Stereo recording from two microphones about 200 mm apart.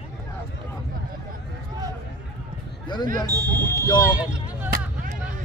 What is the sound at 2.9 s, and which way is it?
Speech, 20° left (ahead or behind).